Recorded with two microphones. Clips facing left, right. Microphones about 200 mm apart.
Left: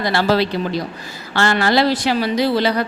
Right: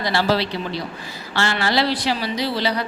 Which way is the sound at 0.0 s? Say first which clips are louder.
Left 3 dB; 50° left (ahead or behind).